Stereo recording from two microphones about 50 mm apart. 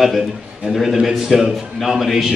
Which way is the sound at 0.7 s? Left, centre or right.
Centre.